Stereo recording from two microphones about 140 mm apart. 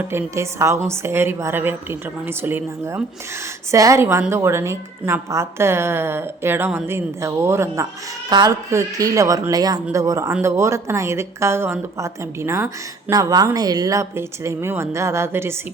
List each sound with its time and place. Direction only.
0.0 s a woman's voice: 15° right (ahead or behind)